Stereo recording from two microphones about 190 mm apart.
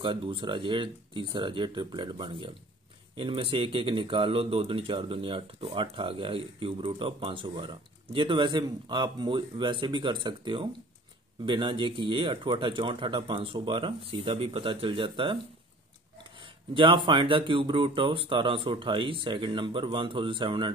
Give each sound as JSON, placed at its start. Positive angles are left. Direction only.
{"t": 0.0, "sound": "speech", "side_deg": -25}
{"t": 16.3, "sound": "speech", "side_deg": -25}